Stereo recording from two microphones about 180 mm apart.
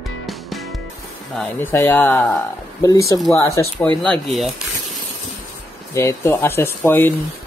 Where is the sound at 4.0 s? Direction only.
Centre (ahead or behind).